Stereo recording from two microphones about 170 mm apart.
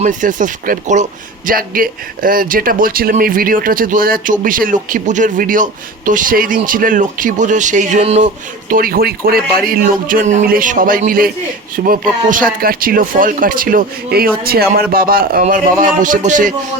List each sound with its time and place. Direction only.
0.0 s speech: 50° right (ahead or behind)
8.7 s speech: 60° right (ahead or behind)